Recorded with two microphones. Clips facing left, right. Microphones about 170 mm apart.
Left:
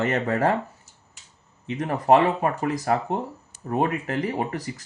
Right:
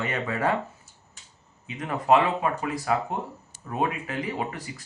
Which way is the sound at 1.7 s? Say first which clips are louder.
Left 3 dB; 40° left (ahead or behind).